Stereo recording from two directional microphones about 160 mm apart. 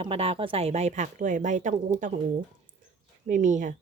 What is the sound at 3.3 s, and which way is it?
Speech, 50° right (ahead or behind).